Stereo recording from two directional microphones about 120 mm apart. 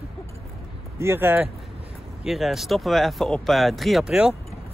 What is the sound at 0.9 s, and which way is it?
Speech, 20° right (ahead or behind).